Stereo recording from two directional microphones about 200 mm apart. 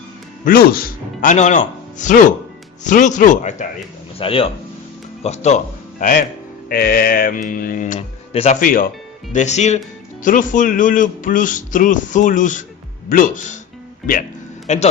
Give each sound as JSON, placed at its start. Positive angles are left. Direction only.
{"t": 0.4, "sound": "speech", "side_deg": 45}
{"t": 4.2, "sound": "speech", "side_deg": 25}
{"t": 8.6, "sound": "speech", "side_deg": 45}
{"t": 14.7, "sound": "speech", "side_deg": 35}